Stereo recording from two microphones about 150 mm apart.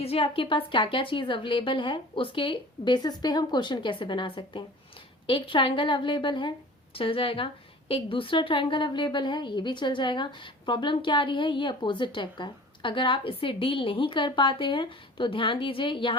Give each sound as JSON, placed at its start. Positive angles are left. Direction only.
{"t": 0.0, "sound": "a woman's voice", "side_deg": 40}